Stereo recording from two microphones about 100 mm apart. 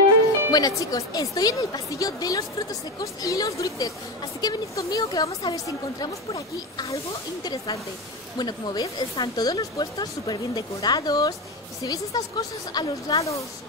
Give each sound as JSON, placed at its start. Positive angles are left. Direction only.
{"t": 0.5, "sound": "speech", "side_deg": 40}